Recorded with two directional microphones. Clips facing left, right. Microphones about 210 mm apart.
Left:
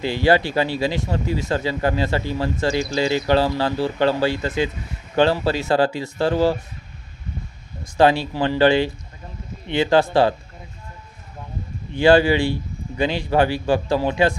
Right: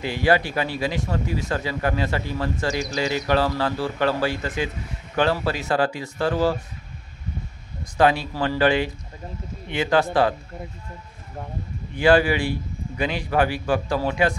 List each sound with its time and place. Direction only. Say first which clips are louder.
0.0 s speech: left 3 dB; 30° left (ahead or behind)
7.8 s speech: left 3 dB; 30° left (ahead or behind)
11.9 s speech: left 3 dB; 25° left (ahead or behind)